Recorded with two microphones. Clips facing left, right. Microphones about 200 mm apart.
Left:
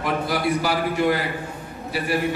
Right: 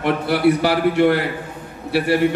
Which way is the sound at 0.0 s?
65° right (ahead or behind).